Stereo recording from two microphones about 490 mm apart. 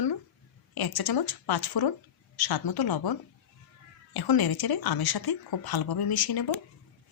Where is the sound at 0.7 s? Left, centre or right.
Left.